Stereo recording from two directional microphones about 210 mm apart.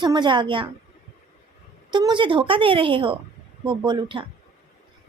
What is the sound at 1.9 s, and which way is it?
A woman's voice, 20° right (ahead or behind).